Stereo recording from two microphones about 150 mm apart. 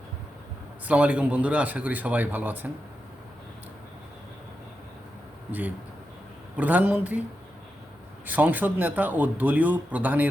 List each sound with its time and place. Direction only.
0.9 s a man's voice: 10° right (ahead or behind)
5.5 s a man's voice: 10° right (ahead or behind)
8.3 s a man's voice: 10° right (ahead or behind)